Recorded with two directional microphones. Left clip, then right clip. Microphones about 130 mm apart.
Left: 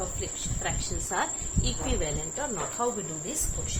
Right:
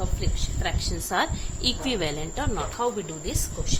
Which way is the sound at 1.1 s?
70° right (ahead or behind).